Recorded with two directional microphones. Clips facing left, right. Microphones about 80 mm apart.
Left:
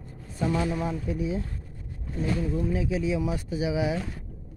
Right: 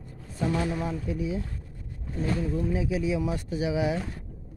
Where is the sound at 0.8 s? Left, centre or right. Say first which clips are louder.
Left 1 dB; left.